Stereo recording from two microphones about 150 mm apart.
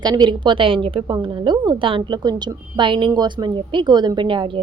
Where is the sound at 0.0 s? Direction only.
30° right (ahead or behind).